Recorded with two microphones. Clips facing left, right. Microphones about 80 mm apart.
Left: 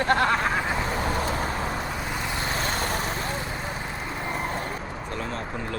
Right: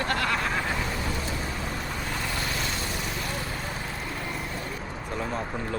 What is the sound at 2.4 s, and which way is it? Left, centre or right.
Vehicle, left.